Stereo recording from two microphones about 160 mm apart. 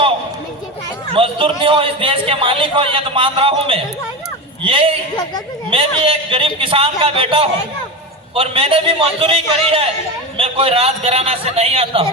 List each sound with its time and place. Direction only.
1.1 s a man's voice: 35° right (ahead or behind)